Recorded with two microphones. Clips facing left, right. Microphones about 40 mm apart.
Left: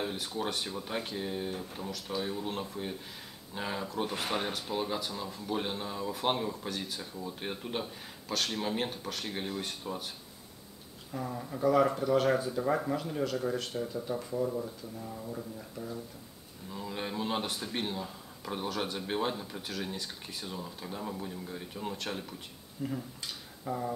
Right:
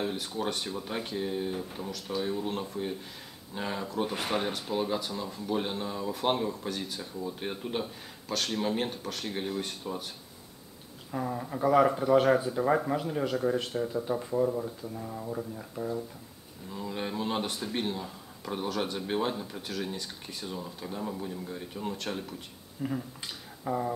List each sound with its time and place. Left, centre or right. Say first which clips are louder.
0.0 s speech: right 2 dB; centre
11.1 s speech: right 4 dB; centre
16.7 s speech: right 2 dB; centre
22.8 s speech: right 3 dB; centre